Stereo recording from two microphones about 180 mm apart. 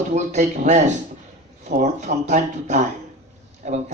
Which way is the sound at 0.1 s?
40° right (ahead or behind).